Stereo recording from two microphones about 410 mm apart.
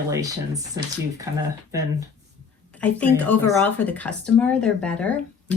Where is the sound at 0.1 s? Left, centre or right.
Centre.